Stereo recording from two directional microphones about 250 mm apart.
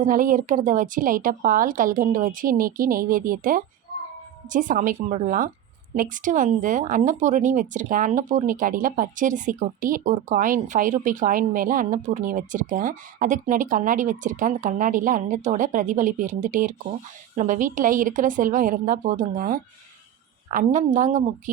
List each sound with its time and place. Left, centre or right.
0.0 s speech: right